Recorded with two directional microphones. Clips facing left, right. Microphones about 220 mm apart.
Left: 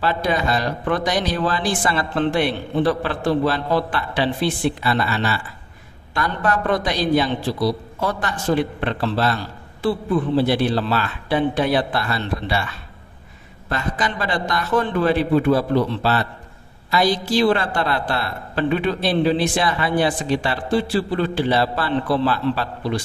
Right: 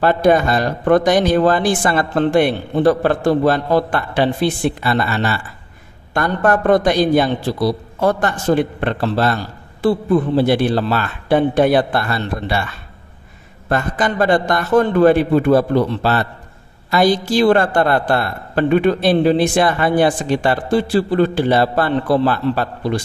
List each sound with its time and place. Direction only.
0.0 s a woman's voice: 50° right (ahead or behind)
13.7 s a woman's voice: 50° right (ahead or behind)